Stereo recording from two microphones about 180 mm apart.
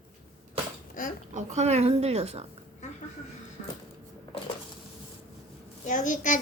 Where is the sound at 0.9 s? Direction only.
50° left (ahead or behind).